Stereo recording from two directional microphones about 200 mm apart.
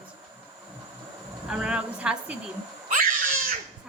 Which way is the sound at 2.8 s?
40° right (ahead or behind).